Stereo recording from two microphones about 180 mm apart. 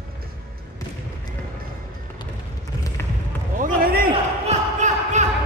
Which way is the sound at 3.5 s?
50° right (ahead or behind).